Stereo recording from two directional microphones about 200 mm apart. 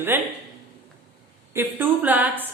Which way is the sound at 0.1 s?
10° right (ahead or behind).